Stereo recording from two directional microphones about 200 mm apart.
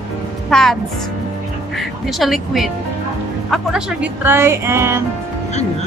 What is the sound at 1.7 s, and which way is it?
Speech, centre (ahead or behind).